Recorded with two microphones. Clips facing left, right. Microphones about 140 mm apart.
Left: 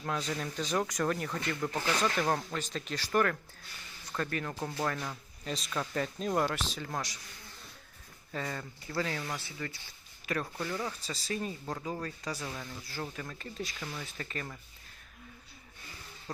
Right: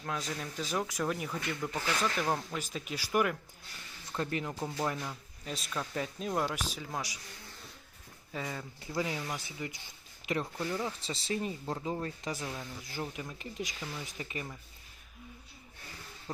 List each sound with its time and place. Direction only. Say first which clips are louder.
0.0 s speech: left 3 dB; centre (ahead or behind); by 4.5 s 20° right (ahead or behind)
4.6 s speech: even; 10° right (ahead or behind)
8.3 s speech: left 1 dB; 5° right (ahead or behind)